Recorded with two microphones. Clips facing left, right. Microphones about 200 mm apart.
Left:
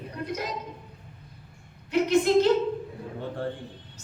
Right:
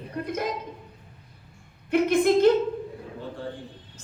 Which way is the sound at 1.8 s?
55° right (ahead or behind).